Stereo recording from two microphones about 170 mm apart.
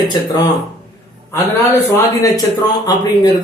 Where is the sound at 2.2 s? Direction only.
20° left (ahead or behind).